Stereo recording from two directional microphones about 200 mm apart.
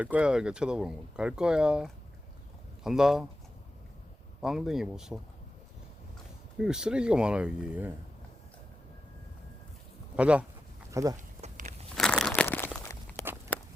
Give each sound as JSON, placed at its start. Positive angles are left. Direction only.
{"t": 0.0, "sound": "speech", "side_deg": -5}
{"t": 4.4, "sound": "speech", "side_deg": 0}
{"t": 6.6, "sound": "speech", "side_deg": -5}
{"t": 10.2, "sound": "speech", "side_deg": -5}
{"t": 10.9, "sound": "speech", "side_deg": -15}
{"t": 11.3, "sound": "walk", "side_deg": -35}
{"t": 11.9, "sound": "crumpling", "side_deg": 5}